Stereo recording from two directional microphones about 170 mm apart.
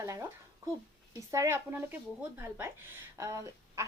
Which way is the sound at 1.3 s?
15° right (ahead or behind).